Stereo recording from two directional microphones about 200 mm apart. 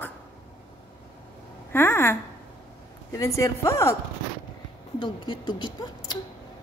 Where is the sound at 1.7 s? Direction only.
10° left (ahead or behind).